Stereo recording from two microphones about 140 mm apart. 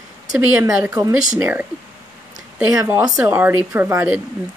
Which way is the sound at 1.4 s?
15° right (ahead or behind).